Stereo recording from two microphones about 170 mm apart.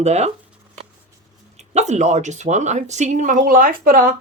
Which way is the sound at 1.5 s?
40° right (ahead or behind).